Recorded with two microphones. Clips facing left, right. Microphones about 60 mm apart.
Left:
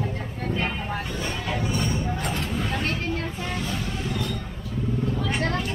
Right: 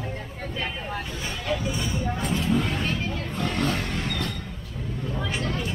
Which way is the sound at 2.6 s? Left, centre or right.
Left.